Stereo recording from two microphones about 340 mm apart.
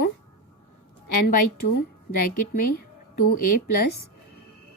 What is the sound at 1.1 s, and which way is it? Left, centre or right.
A woman's voice, left.